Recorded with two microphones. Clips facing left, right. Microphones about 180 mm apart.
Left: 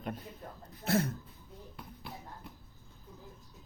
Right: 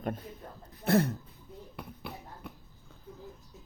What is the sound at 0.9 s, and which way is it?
Speech, 60° right (ahead or behind).